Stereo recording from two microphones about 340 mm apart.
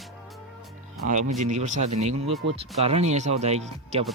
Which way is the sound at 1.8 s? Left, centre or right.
Right.